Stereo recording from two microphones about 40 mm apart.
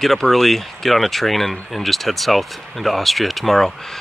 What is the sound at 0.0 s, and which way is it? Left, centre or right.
Speech, centre.